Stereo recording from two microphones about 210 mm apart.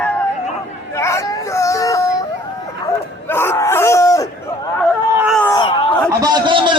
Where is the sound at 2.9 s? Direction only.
10° left (ahead or behind).